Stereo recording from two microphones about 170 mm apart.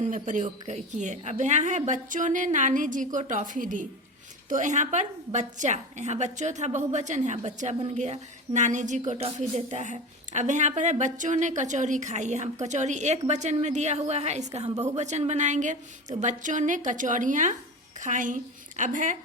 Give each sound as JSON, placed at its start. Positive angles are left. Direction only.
{"t": 0.0, "sound": "a woman's voice", "side_deg": -50}